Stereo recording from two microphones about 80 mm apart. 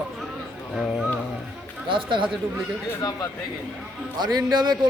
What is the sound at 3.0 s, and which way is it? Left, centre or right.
Speech, left.